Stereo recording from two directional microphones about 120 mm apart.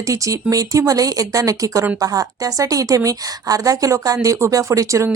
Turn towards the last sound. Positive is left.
turn(degrees=-25)  # may be behind; listen again after turning